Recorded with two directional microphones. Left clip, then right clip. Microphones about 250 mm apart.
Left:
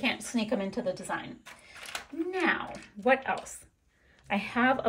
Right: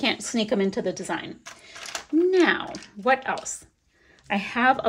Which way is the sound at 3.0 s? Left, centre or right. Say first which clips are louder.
Right 4 dB; centre.